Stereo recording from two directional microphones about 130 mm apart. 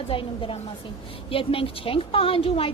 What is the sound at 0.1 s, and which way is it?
A woman's voice, 45° left (ahead or behind).